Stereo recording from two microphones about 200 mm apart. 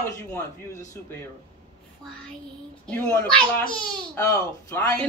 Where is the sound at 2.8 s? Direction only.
10° left (ahead or behind).